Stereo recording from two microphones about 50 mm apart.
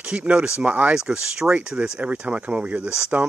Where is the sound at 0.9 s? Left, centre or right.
Centre; by 2.9 s right.